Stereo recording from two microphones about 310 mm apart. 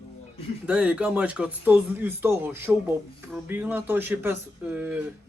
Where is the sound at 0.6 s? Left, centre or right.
Centre.